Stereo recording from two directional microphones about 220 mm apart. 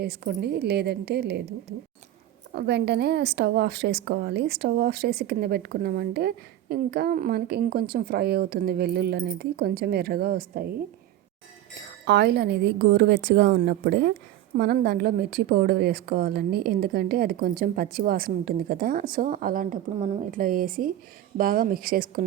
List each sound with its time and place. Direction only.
0.0 s a woman's voice: 45° right (ahead or behind)
2.5 s a woman's voice: 50° right (ahead or behind)
12.0 s a woman's voice: 50° right (ahead or behind)